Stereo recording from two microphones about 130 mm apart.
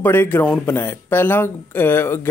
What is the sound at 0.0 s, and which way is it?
Speech, 15° left (ahead or behind).